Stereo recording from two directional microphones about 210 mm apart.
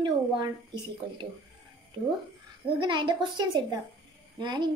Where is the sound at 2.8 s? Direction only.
20° right (ahead or behind).